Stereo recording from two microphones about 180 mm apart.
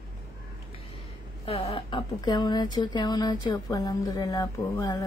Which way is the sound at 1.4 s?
30° left (ahead or behind).